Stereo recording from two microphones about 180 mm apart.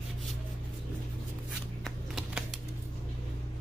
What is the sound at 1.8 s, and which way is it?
Shuffling cards, centre (ahead or behind).